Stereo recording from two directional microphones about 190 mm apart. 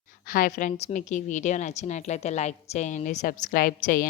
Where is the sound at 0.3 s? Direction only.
45° left (ahead or behind).